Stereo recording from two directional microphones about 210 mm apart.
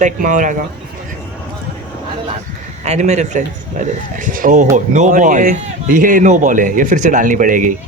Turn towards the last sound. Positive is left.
turn(degrees=-40)  # may be behind; listen again after turning